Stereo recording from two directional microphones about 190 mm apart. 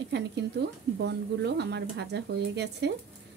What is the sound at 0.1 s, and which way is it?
Speech, 65° right (ahead or behind).